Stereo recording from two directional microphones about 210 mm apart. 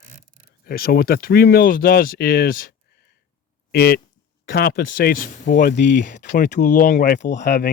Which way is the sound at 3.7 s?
50° left (ahead or behind).